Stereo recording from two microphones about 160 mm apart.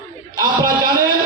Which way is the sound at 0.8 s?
65° right (ahead or behind).